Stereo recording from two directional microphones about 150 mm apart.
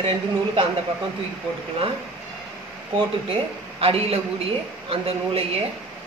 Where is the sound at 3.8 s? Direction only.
40° right (ahead or behind).